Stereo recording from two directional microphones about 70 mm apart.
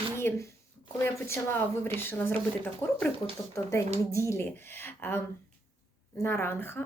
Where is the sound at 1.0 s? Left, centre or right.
Left.